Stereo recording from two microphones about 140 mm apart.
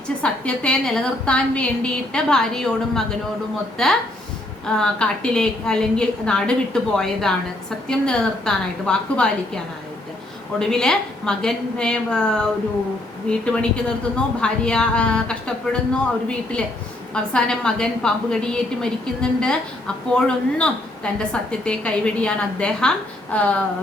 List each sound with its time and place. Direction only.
0.2 s a woman's voice: 5° left (ahead or behind)
10.6 s a woman's voice: 5° left (ahead or behind)
17.2 s a woman's voice: 5° left (ahead or behind)